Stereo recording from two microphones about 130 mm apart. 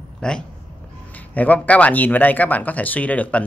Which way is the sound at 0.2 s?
5° left (ahead or behind).